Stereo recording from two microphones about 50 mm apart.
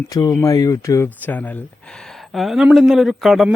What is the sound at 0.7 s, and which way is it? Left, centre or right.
Speech, left.